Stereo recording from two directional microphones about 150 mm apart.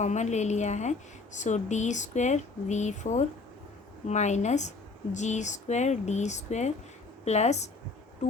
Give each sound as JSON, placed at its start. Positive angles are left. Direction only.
{"t": 0.0, "sound": "a woman's voice", "side_deg": 50}